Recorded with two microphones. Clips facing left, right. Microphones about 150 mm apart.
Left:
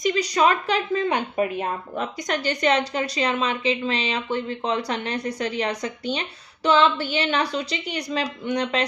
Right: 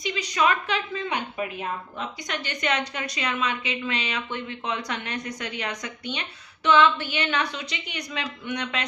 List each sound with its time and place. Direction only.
0.0 s speech: 40° left (ahead or behind)